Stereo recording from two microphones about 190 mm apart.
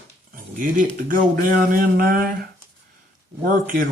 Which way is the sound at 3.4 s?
45° right (ahead or behind).